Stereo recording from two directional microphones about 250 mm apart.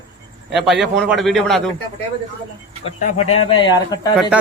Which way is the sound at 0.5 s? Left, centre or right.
Centre.